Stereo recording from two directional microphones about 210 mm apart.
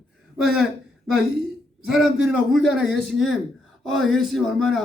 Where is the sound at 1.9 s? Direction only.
Centre (ahead or behind).